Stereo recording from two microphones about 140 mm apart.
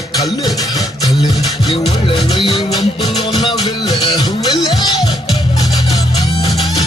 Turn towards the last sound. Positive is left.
turn(degrees=0)  # may be behind; listen again after turning